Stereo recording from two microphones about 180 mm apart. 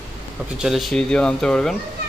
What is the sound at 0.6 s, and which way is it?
Speech, centre (ahead or behind).